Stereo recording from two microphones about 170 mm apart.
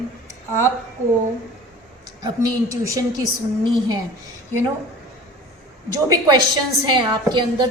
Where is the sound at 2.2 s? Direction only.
20° right (ahead or behind).